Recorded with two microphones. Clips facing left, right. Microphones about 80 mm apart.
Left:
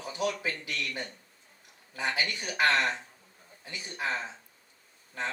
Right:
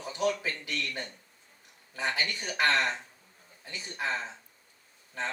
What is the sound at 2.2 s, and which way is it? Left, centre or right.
Speech, centre.